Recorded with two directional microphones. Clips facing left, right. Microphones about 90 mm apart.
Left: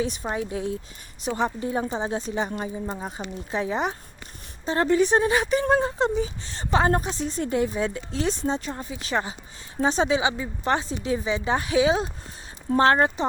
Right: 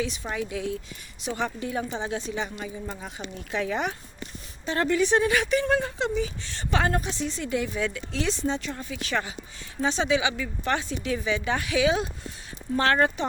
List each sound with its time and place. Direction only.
0.0 s speech: 45° left (ahead or behind)